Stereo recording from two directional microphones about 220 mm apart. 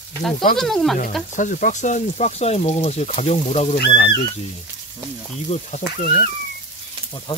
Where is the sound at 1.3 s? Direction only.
35° left (ahead or behind).